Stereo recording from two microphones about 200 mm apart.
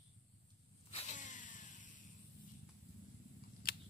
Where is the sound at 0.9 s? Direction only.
35° left (ahead or behind).